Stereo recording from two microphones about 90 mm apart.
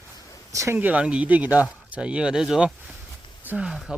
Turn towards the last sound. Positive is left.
turn(degrees=-10)  # may be behind; listen again after turning